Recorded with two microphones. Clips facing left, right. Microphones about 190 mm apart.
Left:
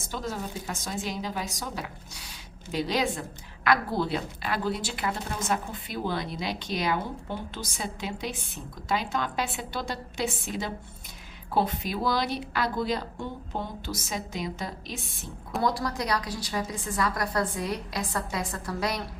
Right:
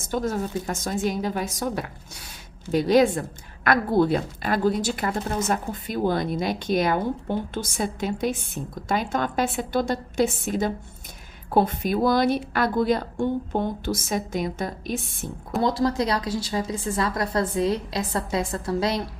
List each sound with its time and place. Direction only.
0.1 s speech: 50° right (ahead or behind)
15.6 s a woman's voice: 25° right (ahead or behind)